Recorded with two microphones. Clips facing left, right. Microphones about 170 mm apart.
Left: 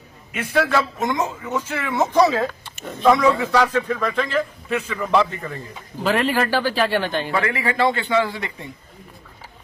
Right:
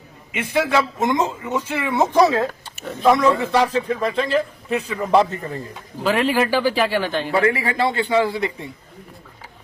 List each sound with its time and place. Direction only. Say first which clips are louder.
0.3 s a man's voice: right 1 dB; 20° right (ahead or behind)
2.8 s speech: even; centre (ahead or behind)
3.5 s a man's voice: even; 25° right (ahead or behind)
6.0 s speech: right 1 dB; centre (ahead or behind)
7.3 s a man's voice: right 4 dB; 30° right (ahead or behind)